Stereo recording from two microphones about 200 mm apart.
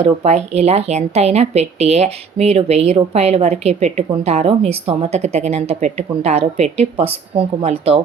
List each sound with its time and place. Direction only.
0.0 s a woman's voice: 35° right (ahead or behind)